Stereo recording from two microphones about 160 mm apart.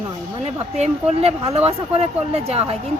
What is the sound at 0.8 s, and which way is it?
Speech, 40° right (ahead or behind).